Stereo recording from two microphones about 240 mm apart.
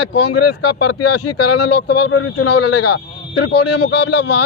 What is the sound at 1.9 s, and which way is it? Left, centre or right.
Speech, left.